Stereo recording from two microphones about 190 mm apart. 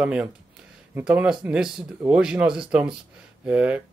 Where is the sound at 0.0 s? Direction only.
5° right (ahead or behind).